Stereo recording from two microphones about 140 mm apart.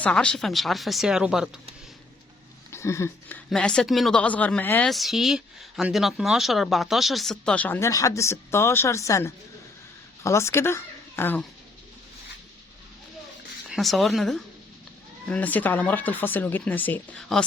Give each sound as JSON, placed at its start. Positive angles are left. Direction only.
{"t": 0.0, "sound": "speech", "side_deg": 5}
{"t": 2.7, "sound": "speech", "side_deg": 20}
{"t": 4.9, "sound": "speech", "side_deg": 0}
{"t": 13.7, "sound": "speech", "side_deg": 0}